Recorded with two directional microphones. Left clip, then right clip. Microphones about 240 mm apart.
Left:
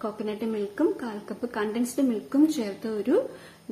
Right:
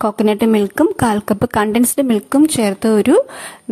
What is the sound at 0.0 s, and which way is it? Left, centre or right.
A woman's voice, right.